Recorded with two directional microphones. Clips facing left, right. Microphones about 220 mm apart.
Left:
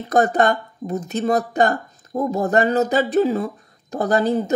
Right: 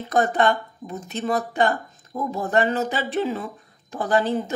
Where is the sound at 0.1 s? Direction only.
40° left (ahead or behind).